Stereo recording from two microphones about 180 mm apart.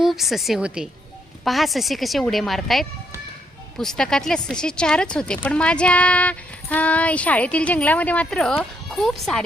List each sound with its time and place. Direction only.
0.0 s speech: centre (ahead or behind)